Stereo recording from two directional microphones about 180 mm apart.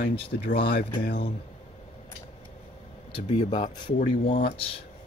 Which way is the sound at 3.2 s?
35° left (ahead or behind).